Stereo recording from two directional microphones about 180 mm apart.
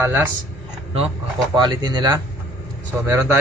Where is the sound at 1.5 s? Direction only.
25° right (ahead or behind).